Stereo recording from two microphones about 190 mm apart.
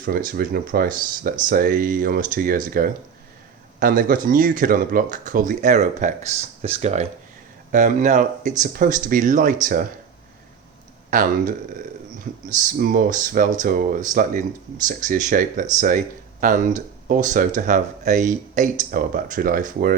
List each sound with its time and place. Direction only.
0.0 s speech: 50° right (ahead or behind)
11.1 s speech: 45° right (ahead or behind)